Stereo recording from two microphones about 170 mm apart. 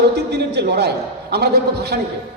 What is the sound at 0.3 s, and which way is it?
A man's voice, 75° right (ahead or behind).